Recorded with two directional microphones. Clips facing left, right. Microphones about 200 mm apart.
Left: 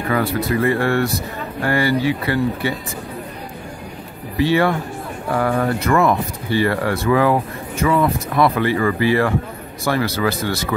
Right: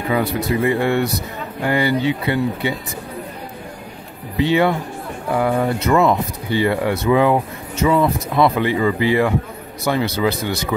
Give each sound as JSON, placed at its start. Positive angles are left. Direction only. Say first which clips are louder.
{"t": 0.1, "sound": "speech", "louder": "even", "side_deg": -15}
{"t": 4.4, "sound": "speech", "louder": "even", "side_deg": -20}